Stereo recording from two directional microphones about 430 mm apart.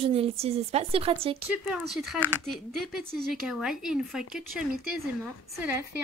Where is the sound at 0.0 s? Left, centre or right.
Centre.